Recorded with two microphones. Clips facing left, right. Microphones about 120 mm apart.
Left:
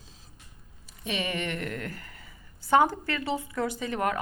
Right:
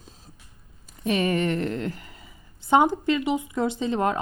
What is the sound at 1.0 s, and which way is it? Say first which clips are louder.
Speech: right 8 dB; 45° right (ahead or behind).